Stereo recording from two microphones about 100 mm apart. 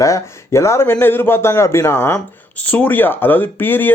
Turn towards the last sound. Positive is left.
turn(degrees=20)  # may be behind; listen again after turning